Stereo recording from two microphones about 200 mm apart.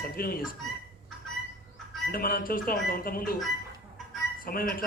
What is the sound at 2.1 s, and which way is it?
A man's voice, 45° left (ahead or behind).